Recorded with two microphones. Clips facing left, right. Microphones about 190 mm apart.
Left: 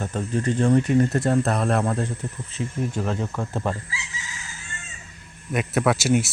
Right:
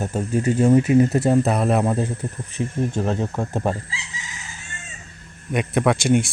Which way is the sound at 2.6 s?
25° right (ahead or behind).